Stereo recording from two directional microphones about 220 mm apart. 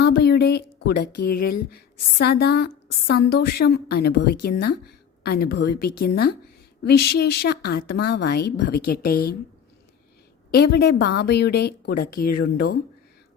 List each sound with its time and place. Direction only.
0.0 s a sound: 50° left (ahead or behind)
1.2 s a woman's voice: 45° left (ahead or behind)
10.5 s a woman's voice: 45° left (ahead or behind)